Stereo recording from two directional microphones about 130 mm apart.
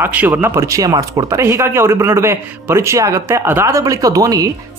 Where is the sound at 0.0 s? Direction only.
15° right (ahead or behind).